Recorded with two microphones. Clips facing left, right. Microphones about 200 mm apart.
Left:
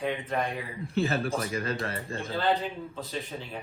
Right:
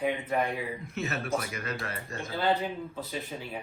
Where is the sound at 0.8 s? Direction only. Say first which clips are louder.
Left 6 dB; 30° left (ahead or behind).